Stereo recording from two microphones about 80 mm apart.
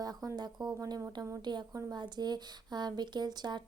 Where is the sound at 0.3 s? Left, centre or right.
Right.